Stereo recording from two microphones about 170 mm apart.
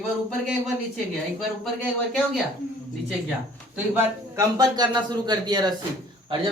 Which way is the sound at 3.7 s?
15° right (ahead or behind).